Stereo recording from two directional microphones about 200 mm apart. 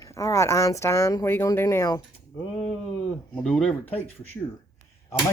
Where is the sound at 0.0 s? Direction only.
15° left (ahead or behind).